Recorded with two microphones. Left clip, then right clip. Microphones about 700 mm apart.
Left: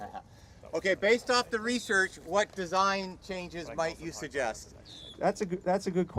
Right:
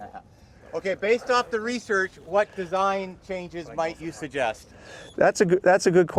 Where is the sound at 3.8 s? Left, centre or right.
Right.